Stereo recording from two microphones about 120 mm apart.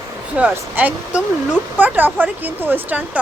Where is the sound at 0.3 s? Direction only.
10° right (ahead or behind).